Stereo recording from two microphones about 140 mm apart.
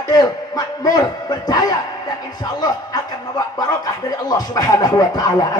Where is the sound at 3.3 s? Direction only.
25° left (ahead or behind).